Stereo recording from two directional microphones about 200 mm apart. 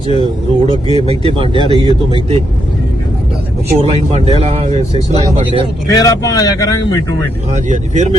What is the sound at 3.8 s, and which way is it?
Speech, 30° right (ahead or behind).